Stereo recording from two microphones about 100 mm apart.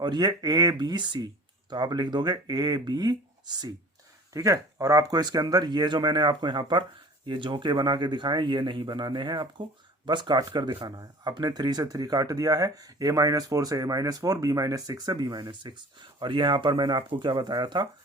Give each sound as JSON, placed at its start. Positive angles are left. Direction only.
{"t": 0.0, "sound": "speech", "side_deg": -45}
{"t": 4.4, "sound": "speech", "side_deg": -35}